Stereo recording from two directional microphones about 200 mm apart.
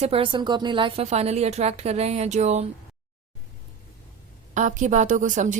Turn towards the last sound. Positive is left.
turn(degrees=-40)  # may be behind; listen again after turning